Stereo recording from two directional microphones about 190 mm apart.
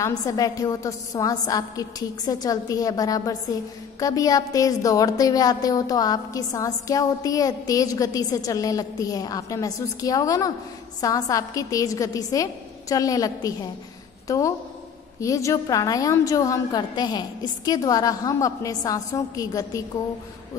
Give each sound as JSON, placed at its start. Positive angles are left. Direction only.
{"t": 0.0, "sound": "a woman's voice", "side_deg": 20}